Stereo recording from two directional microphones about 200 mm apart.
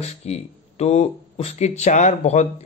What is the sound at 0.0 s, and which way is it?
Speech, 35° left (ahead or behind).